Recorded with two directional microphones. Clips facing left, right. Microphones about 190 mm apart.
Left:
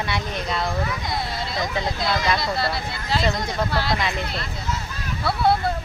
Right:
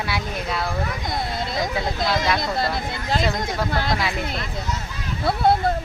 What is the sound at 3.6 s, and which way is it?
Speech, 50° right (ahead or behind).